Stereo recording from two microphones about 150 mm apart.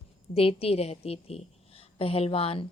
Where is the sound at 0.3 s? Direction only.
40° left (ahead or behind).